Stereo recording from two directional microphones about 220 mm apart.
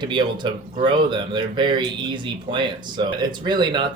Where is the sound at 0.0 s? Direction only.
20° right (ahead or behind).